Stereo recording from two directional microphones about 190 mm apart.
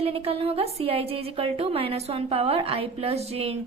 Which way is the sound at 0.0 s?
30° right (ahead or behind).